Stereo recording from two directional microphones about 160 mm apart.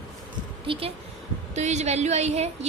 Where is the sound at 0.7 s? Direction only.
35° right (ahead or behind).